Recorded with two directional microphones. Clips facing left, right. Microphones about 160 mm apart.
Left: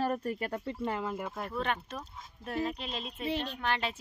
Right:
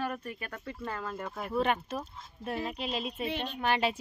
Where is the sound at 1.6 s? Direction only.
5° right (ahead or behind).